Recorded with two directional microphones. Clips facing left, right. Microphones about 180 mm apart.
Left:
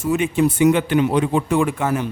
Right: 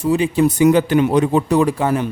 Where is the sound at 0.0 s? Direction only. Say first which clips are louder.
Right 3 dB; 35° right (ahead or behind).